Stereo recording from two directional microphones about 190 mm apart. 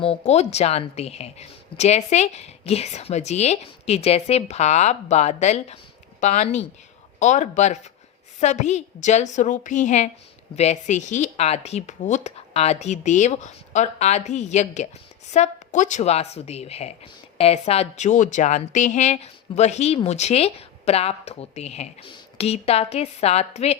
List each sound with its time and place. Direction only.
0.0 s a woman's voice: 35° left (ahead or behind)